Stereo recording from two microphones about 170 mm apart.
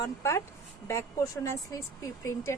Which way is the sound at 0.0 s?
15° left (ahead or behind).